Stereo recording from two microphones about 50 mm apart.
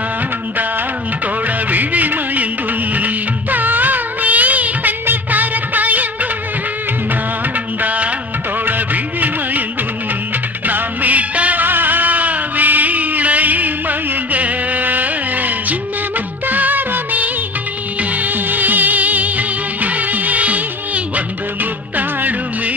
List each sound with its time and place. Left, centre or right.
1.7 s music: right
5.0 s music of bollywood: right
7.8 s music of bollywood: right
8.6 s music: right
10.7 s music: right
16.4 s music of bollywood: right
18.1 s music: right